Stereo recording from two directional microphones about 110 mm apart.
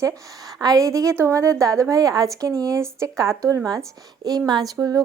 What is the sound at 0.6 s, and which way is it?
A woman's voice, 30° right (ahead or behind).